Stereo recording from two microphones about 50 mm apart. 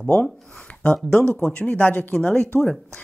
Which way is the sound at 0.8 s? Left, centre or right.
Left.